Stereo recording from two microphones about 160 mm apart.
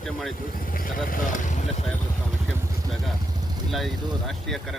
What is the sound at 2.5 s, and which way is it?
Vehicle, centre (ahead or behind).